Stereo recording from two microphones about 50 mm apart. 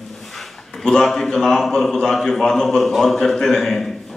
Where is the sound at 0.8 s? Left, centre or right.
Centre.